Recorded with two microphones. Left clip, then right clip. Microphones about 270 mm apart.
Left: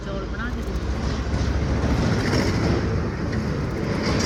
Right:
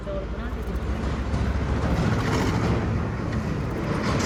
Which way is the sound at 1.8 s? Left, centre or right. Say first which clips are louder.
Left 2 dB; right.